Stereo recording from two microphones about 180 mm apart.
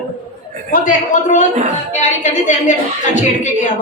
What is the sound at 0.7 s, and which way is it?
A woman's voice, 45° left (ahead or behind).